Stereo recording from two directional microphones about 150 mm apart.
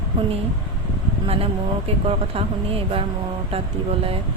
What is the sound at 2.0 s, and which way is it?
Speech, 40° right (ahead or behind).